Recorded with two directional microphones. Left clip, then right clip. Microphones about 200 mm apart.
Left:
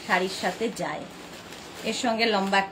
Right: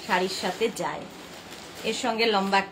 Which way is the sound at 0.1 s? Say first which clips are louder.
Left 1 dB; 15° right (ahead or behind).